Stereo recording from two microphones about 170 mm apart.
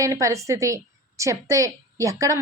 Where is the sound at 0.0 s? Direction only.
20° right (ahead or behind).